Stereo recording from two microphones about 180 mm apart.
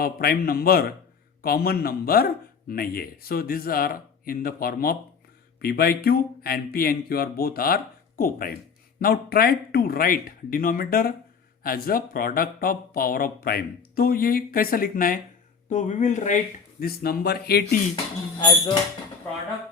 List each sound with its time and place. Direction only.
0.0 s speech: 55° left (ahead or behind)
16.8 s speech: 60° left (ahead or behind)
18.3 s speech: 25° left (ahead or behind)